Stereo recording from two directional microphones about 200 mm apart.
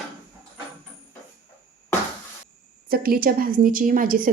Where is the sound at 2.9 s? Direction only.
50° right (ahead or behind).